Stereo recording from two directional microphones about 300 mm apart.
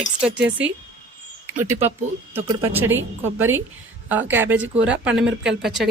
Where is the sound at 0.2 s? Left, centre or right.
Centre.